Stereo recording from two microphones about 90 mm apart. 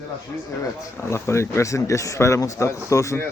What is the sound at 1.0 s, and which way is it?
Speech, 30° left (ahead or behind).